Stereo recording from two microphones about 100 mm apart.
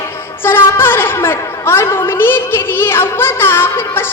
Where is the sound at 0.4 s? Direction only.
20° left (ahead or behind).